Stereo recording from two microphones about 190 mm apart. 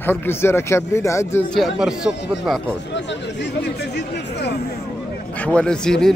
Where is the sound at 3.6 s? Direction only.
60° left (ahead or behind).